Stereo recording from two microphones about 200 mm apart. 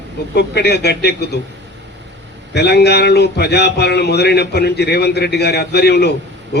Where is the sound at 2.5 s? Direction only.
55° left (ahead or behind).